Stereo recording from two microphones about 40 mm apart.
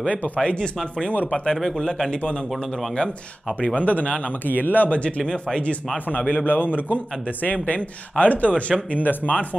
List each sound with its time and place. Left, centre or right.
0.1 s speech: left
3.7 s speech: left
4.5 s speech: left
5.2 s speech: left
6.4 s speech: left
7.6 s speech: left